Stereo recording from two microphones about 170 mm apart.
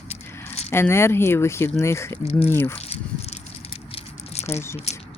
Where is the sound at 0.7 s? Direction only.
15° left (ahead or behind).